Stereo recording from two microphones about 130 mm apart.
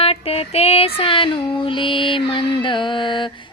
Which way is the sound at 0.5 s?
50° left (ahead or behind).